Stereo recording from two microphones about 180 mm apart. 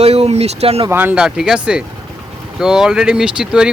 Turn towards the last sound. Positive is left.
turn(degrees=-5)  # may be behind; listen again after turning